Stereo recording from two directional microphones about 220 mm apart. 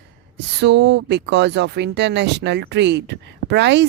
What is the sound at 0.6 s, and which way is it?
Speech, 50° right (ahead or behind).